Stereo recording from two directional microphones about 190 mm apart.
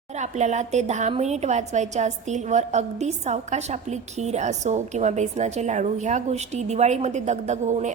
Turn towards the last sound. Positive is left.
turn(degrees=-40)  # may be behind; listen again after turning